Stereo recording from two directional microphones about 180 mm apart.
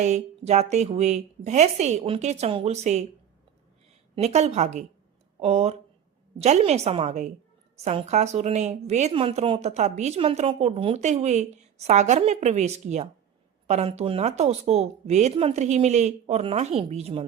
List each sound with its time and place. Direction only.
0.0 s a woman's voice: 40° right (ahead or behind)
4.1 s a woman's voice: 40° right (ahead or behind)